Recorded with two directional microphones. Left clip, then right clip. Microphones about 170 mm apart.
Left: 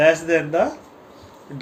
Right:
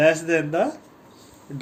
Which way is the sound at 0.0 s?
30° right (ahead or behind).